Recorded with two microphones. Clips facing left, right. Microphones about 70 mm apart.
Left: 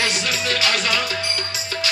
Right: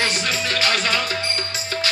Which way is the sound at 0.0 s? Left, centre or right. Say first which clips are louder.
Even; right.